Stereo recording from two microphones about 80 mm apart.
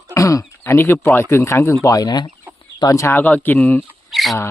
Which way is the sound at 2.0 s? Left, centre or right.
Left.